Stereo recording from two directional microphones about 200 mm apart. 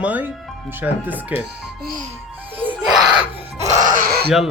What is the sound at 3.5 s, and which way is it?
Music, 35° right (ahead or behind).